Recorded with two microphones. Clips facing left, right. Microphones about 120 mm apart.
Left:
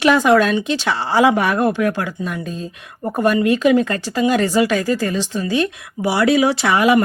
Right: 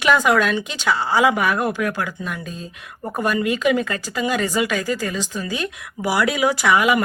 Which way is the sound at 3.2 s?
35° left (ahead or behind).